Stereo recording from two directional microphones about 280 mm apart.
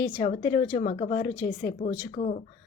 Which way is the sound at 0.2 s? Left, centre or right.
Left.